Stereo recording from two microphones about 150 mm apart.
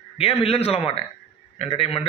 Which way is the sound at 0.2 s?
40° left (ahead or behind).